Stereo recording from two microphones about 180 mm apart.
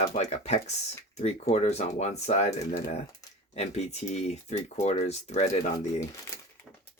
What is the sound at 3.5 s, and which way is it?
Speech, 35° left (ahead or behind).